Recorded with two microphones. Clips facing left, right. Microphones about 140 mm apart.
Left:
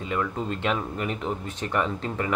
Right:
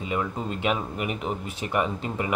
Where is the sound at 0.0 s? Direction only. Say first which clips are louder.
Even; 15° right (ahead or behind).